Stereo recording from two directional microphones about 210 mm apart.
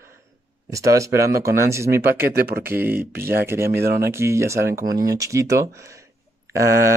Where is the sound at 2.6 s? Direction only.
10° right (ahead or behind).